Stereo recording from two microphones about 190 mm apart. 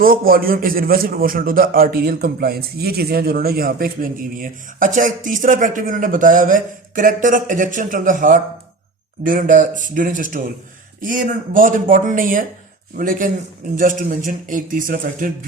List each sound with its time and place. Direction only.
0.0 s a man's voice: 50° right (ahead or behind)